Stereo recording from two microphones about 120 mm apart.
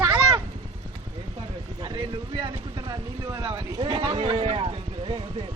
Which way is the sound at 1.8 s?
45° right (ahead or behind).